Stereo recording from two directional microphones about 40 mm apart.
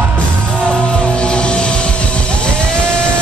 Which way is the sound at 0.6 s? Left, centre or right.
Left.